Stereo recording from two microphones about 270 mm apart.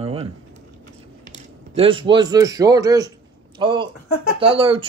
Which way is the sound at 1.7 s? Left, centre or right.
Centre.